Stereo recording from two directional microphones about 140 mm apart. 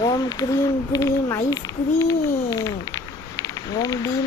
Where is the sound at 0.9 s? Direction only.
25° left (ahead or behind).